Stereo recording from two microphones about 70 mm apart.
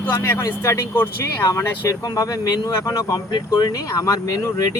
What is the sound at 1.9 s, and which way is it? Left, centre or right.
Speech, left.